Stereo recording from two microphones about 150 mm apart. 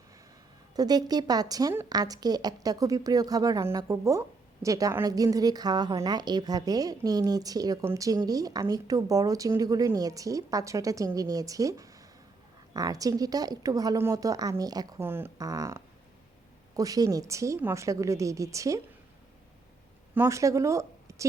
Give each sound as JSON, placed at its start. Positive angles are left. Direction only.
{"t": 0.8, "sound": "a woman's voice", "side_deg": -25}
{"t": 15.0, "sound": "a woman's voice", "side_deg": -15}
{"t": 20.1, "sound": "speech", "side_deg": -20}